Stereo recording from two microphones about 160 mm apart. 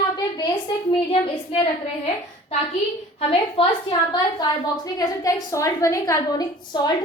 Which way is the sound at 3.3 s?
30° left (ahead or behind).